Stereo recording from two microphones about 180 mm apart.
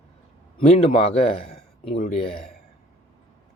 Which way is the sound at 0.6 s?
35° left (ahead or behind).